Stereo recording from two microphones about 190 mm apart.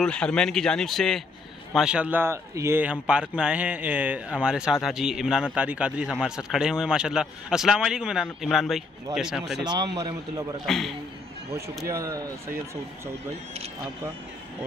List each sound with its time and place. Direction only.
0.0 s speech: 5° left (ahead or behind)
9.9 s a man's voice: 20° right (ahead or behind)
10.6 s speech: centre (ahead or behind)
11.9 s speech: 15° right (ahead or behind)